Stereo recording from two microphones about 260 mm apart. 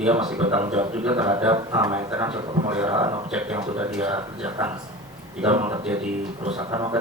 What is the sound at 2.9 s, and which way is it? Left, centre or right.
Speech, centre.